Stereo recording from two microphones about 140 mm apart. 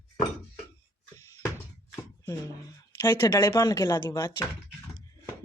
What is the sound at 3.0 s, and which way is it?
Speech, 15° left (ahead or behind).